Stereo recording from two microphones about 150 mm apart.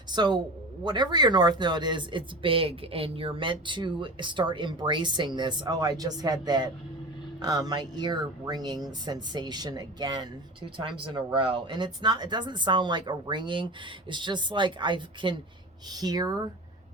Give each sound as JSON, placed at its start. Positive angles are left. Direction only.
{"t": 0.1, "sound": "speech", "side_deg": -30}